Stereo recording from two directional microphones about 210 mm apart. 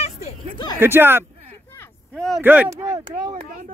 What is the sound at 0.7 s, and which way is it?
Speech, 10° right (ahead or behind).